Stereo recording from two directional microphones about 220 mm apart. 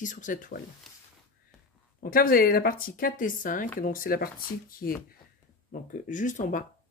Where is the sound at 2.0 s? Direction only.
40° left (ahead or behind).